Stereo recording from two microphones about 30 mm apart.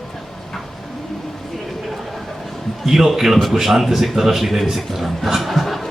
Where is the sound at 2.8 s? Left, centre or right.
Centre.